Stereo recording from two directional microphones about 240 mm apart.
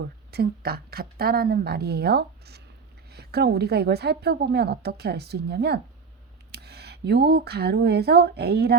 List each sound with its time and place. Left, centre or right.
0.0 s a woman's voice: right